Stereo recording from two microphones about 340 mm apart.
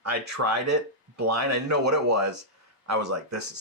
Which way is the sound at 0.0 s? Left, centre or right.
Right.